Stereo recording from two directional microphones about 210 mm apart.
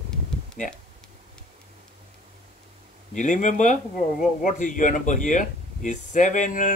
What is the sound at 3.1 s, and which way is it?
Speech, 35° left (ahead or behind).